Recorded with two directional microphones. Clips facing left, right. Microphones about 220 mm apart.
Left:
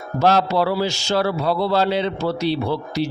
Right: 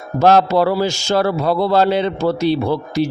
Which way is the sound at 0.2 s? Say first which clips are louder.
Right 5 dB; 50° right (ahead or behind).